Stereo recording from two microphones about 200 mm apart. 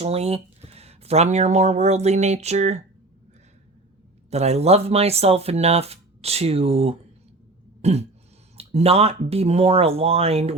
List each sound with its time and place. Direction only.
0.0 s speech: 30° right (ahead or behind)
4.3 s speech: 30° right (ahead or behind)
7.8 s throat clearing: 30° right (ahead or behind)
8.5 s speech: 30° right (ahead or behind)